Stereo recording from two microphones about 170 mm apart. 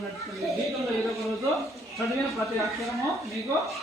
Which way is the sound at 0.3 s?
Centre (ahead or behind).